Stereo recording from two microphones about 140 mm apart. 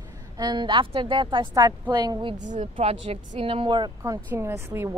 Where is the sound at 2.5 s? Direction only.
50° right (ahead or behind).